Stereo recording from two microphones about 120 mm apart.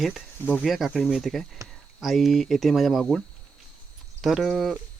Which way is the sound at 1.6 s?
25° right (ahead or behind).